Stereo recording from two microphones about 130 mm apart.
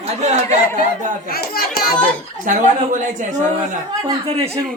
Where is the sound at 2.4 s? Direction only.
75° right (ahead or behind).